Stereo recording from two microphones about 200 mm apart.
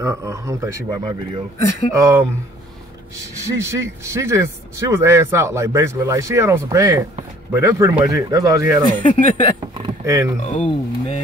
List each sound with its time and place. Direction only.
0.0 s speech: 15° right (ahead or behind)
3.4 s speech: 15° right (ahead or behind)
8.8 s speech: 25° left (ahead or behind)
9.8 s vehicle: 15° right (ahead or behind)
10.4 s speech: 35° left (ahead or behind)